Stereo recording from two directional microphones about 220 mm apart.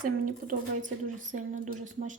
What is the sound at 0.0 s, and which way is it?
A woman's voice, 40° right (ahead or behind).